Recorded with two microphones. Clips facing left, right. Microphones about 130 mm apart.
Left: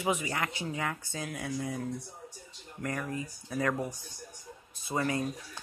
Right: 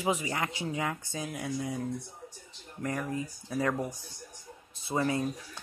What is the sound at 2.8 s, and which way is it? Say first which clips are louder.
Speech: right 2 dB; 20° right (ahead or behind).